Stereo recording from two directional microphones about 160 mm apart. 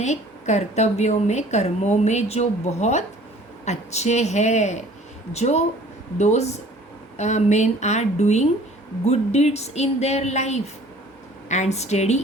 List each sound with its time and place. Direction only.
0.0 s a woman's voice: 45° left (ahead or behind)